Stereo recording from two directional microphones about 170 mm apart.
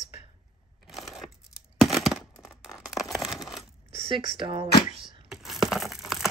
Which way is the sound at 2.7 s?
Centre (ahead or behind).